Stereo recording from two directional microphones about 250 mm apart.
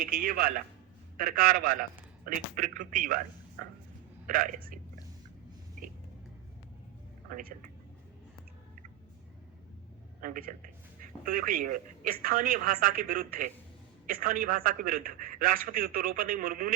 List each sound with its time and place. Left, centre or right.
0.0 s a man's voice: right
4.3 s a man's voice: right
7.3 s a man's voice: right
10.2 s a man's voice: right